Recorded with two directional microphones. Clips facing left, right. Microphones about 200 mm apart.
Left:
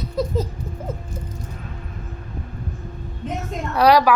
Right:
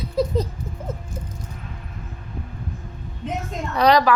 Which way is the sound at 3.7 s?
5° left (ahead or behind).